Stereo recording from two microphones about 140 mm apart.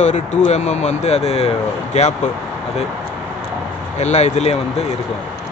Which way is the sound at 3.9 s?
55° left (ahead or behind).